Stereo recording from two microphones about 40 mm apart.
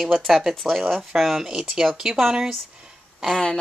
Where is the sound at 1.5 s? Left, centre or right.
Centre.